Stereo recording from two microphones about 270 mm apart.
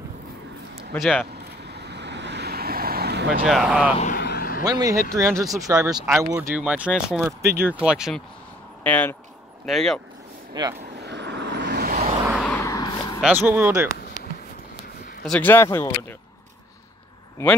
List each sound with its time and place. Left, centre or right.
0.9 s speech: centre
1.7 s vehicle: right
3.4 s speech: centre
4.0 s vehicle: left
4.6 s speech: centre
5.3 s speech: centre
5.7 s speech: centre
10.5 s speech: centre
11.0 s vehicle: right
11.9 s vehicle: right
12.2 s vehicle: centre
12.5 s a sound: centre
13.2 s speech: centre
15.2 s speech: centre